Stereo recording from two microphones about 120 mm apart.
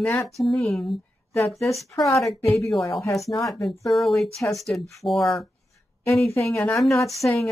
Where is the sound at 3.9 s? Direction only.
Centre (ahead or behind).